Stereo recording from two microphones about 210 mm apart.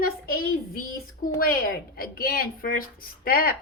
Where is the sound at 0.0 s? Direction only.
45° left (ahead or behind).